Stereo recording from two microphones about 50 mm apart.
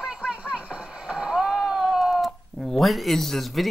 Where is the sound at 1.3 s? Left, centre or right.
Centre.